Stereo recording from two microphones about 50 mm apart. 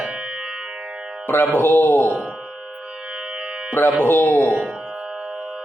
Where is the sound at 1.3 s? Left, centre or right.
Left.